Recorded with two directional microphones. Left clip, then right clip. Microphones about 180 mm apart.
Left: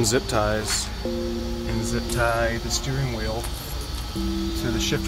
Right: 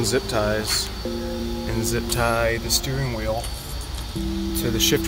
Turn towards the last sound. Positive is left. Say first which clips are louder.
# right 5 dB
turn(degrees=-55)  # may be behind; listen again after turning